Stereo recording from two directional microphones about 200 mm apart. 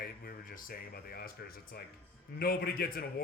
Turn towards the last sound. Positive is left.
turn(degrees=50)  # may be behind; listen again after turning